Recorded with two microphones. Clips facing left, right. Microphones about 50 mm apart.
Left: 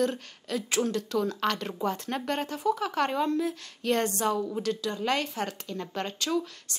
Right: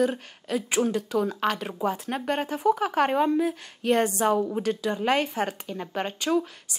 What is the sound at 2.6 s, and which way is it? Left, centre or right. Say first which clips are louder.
A woman's voice: right 5 dB; right.